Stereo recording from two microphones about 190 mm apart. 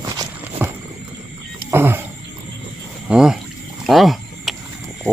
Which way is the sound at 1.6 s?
10° right (ahead or behind).